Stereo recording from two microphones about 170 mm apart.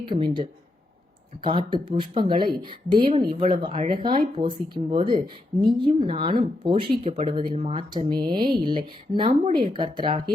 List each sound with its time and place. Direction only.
0.0 s speech: 30° right (ahead or behind)
1.5 s speech: 30° right (ahead or behind)